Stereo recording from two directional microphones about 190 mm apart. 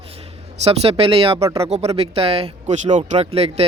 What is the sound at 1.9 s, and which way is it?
Speech, 30° right (ahead or behind).